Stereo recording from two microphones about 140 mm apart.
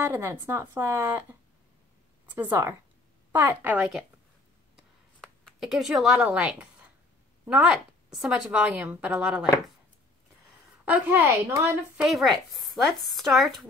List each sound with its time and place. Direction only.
0.0 s a woman's voice: 15° right (ahead or behind)
2.3 s a woman's voice: 15° right (ahead or behind)
4.7 s a sound: centre (ahead or behind)
7.4 s a woman's voice: 10° right (ahead or behind)
10.9 s a woman's voice: 15° right (ahead or behind)
12.0 s speech: centre (ahead or behind)